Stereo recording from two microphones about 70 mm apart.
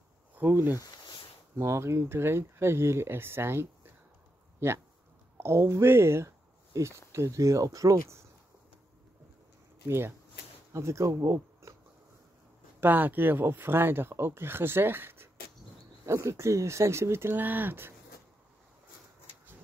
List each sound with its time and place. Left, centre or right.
0.3 s speech: right
1.6 s speech: right
9.8 s speech: right
12.8 s speech: right
16.1 s speech: right